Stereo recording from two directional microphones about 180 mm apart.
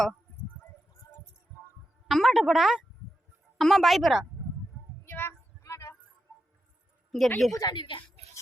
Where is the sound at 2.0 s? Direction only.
Centre (ahead or behind).